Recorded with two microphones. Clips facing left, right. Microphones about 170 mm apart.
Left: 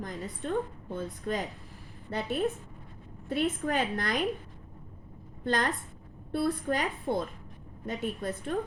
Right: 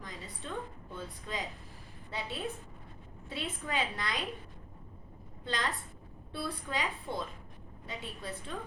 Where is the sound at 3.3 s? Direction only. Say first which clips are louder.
Left 9 dB; 55° left (ahead or behind).